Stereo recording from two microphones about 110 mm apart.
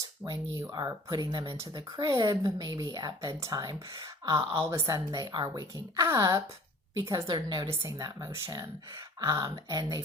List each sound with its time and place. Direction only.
0.3 s a woman's voice: 30° right (ahead or behind)
4.3 s a woman's voice: 25° right (ahead or behind)
7.3 s a woman's voice: 40° right (ahead or behind)